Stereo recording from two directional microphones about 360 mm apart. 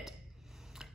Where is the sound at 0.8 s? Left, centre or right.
Centre.